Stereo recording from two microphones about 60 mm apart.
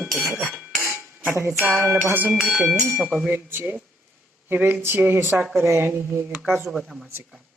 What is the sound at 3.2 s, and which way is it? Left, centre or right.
Speech, right.